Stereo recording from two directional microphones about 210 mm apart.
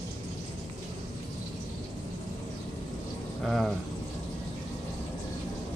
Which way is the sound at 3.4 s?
Centre (ahead or behind).